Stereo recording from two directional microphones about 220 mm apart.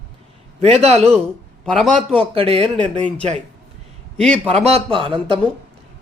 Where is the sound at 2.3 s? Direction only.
25° right (ahead or behind).